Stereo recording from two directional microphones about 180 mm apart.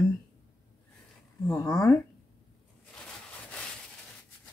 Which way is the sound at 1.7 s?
15° left (ahead or behind).